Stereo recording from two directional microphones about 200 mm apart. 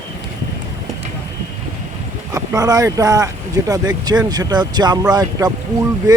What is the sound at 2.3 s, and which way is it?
Speech, 15° right (ahead or behind).